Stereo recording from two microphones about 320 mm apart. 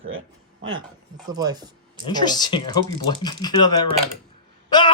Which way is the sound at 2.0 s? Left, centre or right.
Centre.